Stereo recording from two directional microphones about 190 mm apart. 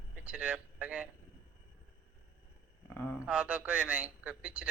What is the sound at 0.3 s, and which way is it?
Speech, 5° right (ahead or behind).